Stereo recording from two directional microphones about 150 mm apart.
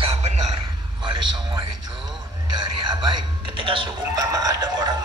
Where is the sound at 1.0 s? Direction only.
30° right (ahead or behind).